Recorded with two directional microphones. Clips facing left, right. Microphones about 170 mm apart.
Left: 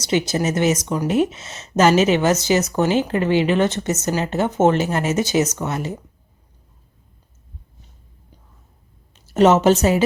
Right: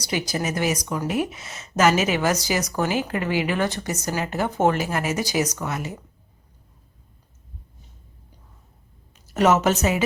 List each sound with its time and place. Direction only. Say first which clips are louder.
0.0 s speech: left 6 dB; 25° left (ahead or behind)
9.1 s a woman's voice: left 5 dB; 25° left (ahead or behind)